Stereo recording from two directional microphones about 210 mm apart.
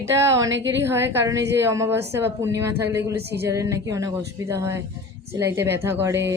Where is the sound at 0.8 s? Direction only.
10° right (ahead or behind).